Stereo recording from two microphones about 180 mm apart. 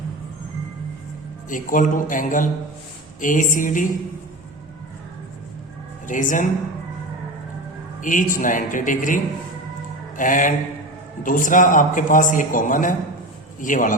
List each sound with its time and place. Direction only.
1.5 s a man's voice: 50° left (ahead or behind)
6.1 s a man's voice: 45° left (ahead or behind)
8.1 s a man's voice: 45° left (ahead or behind)